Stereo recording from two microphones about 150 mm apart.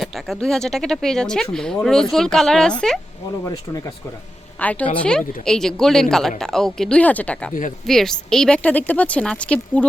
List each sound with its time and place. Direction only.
0.0 s speech: centre (ahead or behind)
3.4 s speech: 20° left (ahead or behind)
4.6 s speech: 10° left (ahead or behind)